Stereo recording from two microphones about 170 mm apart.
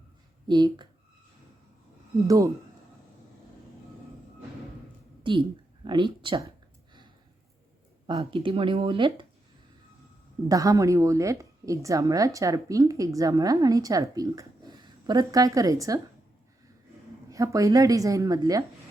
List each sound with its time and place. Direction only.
0.4 s a woman's voice: 25° right (ahead or behind)
2.2 s a woman's voice: 20° right (ahead or behind)
5.2 s a woman's voice: 30° right (ahead or behind)
8.0 s speech: 30° right (ahead or behind)
10.5 s a woman's voice: 20° right (ahead or behind)
17.2 s a woman's voice: 20° right (ahead or behind)